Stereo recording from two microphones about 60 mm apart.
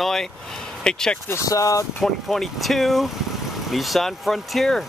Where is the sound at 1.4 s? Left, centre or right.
Left.